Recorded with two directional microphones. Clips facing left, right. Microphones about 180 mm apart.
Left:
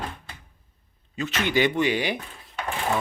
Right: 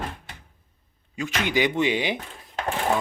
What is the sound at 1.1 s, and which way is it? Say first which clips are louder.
Speech: left 1 dB; 10° right (ahead or behind).